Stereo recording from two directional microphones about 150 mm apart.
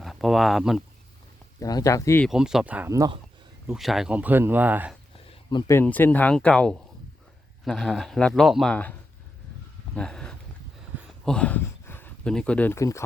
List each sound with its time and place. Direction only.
0.0 s speech: centre (ahead or behind)
1.5 s speech: 25° left (ahead or behind)
2.2 s speech: 5° right (ahead or behind)
5.1 s a sound: 40° left (ahead or behind)
5.7 s speech: 10° left (ahead or behind)